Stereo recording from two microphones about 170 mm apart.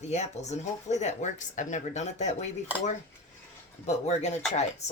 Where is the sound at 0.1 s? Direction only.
40° left (ahead or behind).